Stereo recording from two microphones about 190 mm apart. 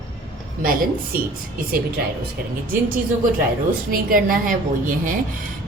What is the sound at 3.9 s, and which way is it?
A woman's voice, 50° right (ahead or behind).